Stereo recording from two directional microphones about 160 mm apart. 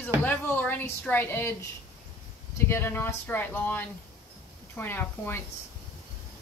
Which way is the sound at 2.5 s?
15° left (ahead or behind).